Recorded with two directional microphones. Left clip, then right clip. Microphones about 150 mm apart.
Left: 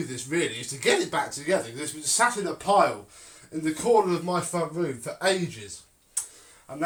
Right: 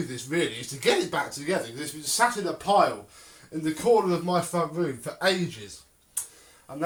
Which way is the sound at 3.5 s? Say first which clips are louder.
Even; 15° left (ahead or behind).